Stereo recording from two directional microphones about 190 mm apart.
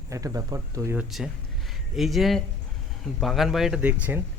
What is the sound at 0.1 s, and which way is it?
Speech, 15° right (ahead or behind).